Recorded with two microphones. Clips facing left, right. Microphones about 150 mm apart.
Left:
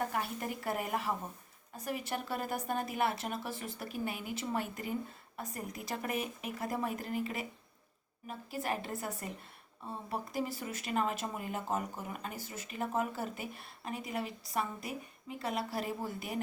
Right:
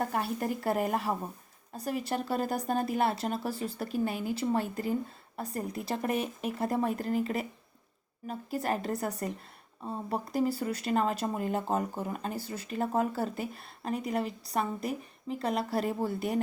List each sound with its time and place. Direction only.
0.1 s speech: 40° right (ahead or behind)
8.4 s speech: 40° right (ahead or behind)